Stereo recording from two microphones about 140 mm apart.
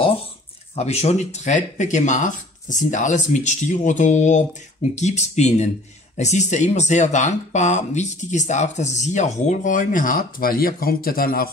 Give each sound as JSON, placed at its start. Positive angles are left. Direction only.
{"t": 0.7, "sound": "speech", "side_deg": 50}